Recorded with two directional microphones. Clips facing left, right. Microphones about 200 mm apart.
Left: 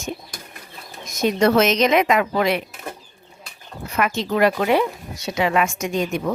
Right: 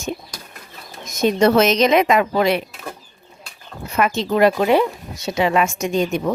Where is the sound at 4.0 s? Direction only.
25° right (ahead or behind).